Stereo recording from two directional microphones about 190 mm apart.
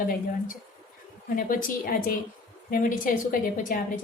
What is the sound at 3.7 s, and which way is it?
Speech, 50° left (ahead or behind).